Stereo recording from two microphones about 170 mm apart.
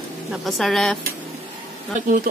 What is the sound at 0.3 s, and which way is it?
Speech, centre (ahead or behind).